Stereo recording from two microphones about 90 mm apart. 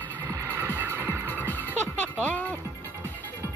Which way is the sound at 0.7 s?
25° right (ahead or behind).